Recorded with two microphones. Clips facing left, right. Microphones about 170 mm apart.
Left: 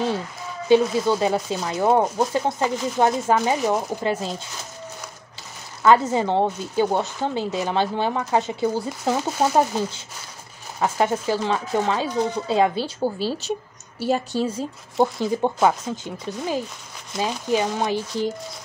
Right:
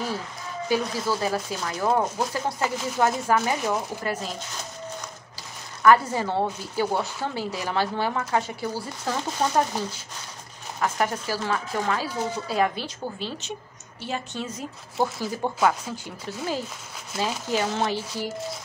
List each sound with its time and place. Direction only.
0.7 s speech: 25° left (ahead or behind)
5.8 s speech: 25° left (ahead or behind)
10.8 s speech: 25° left (ahead or behind)
15.1 s speech: 20° left (ahead or behind)